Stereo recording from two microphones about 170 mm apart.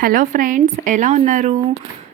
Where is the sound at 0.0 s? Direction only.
50° right (ahead or behind).